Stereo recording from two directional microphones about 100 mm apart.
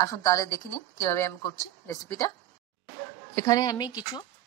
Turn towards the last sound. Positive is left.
turn(degrees=40)  # may be behind; listen again after turning